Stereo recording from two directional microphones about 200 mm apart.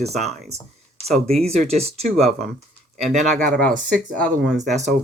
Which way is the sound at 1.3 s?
30° right (ahead or behind).